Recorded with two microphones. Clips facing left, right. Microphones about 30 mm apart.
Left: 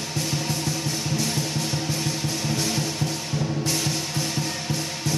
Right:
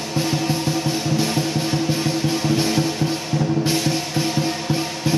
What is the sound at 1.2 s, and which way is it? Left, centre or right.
Music, right.